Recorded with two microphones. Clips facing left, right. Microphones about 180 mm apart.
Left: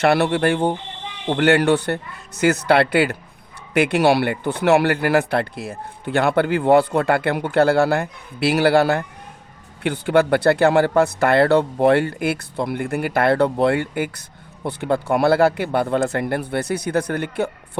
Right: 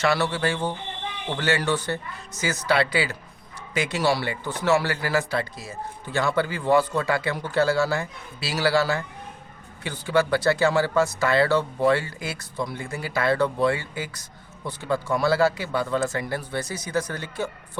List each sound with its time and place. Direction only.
0.0 s speech: 60° left (ahead or behind)